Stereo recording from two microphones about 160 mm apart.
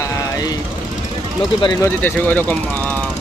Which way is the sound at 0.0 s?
25° left (ahead or behind).